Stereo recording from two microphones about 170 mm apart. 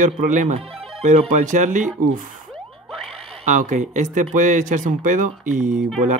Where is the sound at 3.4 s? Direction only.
50° right (ahead or behind).